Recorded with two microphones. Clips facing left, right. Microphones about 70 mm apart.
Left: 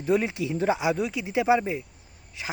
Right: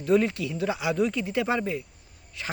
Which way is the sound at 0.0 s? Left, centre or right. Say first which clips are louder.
Right 2 dB; centre.